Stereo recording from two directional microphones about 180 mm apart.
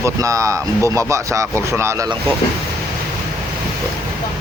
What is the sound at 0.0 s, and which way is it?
Speech, 20° right (ahead or behind).